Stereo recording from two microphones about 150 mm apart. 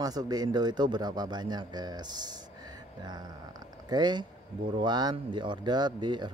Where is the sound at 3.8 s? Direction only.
30° right (ahead or behind).